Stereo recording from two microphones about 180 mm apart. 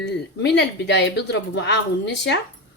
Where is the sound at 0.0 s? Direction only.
70° left (ahead or behind).